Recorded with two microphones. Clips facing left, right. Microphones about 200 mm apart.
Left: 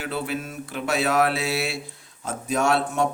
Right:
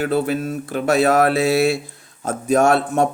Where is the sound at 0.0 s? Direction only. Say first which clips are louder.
Right 9 dB; 45° right (ahead or behind).